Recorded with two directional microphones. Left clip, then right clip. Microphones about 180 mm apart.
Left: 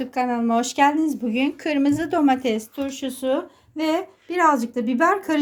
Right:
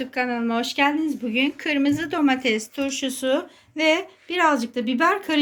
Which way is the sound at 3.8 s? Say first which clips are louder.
Right 3 dB; 30° left (ahead or behind).